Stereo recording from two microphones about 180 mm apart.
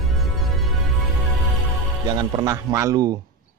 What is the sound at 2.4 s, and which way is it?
Speech, 20° right (ahead or behind).